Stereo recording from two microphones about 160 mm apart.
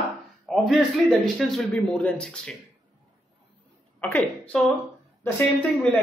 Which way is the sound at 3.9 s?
10° left (ahead or behind).